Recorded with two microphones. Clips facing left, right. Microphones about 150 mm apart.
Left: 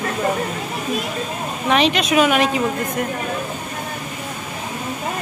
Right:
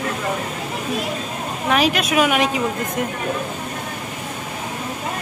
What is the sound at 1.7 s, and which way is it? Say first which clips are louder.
Speech: left 2 dB; 5° right (ahead or behind).